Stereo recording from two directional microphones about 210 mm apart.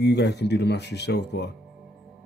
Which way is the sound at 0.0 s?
55° left (ahead or behind).